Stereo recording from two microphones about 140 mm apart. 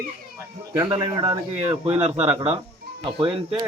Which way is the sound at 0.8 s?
40° right (ahead or behind).